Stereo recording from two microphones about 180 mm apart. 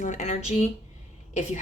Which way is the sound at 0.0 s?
40° left (ahead or behind).